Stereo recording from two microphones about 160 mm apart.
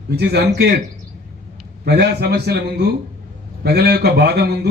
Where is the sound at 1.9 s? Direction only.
90° right.